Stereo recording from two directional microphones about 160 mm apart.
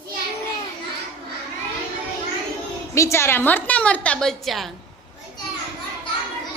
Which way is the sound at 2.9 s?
15° left (ahead or behind).